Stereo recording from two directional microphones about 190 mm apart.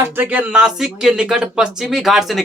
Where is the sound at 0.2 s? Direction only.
5° right (ahead or behind).